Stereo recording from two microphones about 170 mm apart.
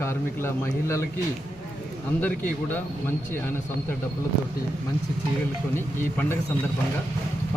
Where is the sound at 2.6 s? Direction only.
10° left (ahead or behind).